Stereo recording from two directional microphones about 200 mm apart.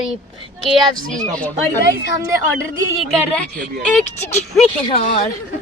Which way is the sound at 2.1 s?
15° right (ahead or behind).